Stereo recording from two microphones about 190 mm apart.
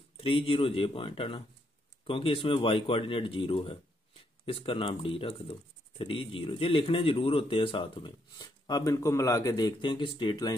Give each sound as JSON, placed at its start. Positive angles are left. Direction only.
{"t": 0.2, "sound": "speech", "side_deg": 30}